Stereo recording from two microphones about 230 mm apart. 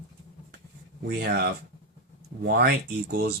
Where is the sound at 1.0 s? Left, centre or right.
Right.